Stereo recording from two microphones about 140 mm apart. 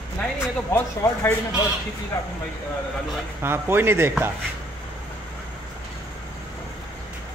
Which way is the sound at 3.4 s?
15° right (ahead or behind).